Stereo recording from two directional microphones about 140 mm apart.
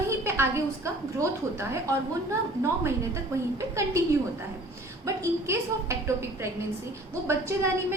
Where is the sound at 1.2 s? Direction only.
20° right (ahead or behind).